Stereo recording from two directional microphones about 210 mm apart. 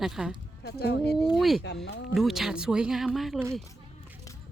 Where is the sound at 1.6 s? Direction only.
55° left (ahead or behind).